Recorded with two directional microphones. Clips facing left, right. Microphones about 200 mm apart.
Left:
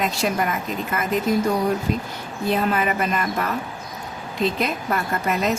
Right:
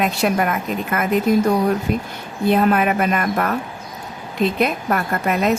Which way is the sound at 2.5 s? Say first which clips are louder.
Right 5 dB; 55° right (ahead or behind).